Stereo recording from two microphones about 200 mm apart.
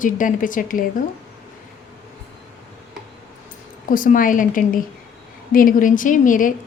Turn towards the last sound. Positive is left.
turn(degrees=40)  # may be behind; listen again after turning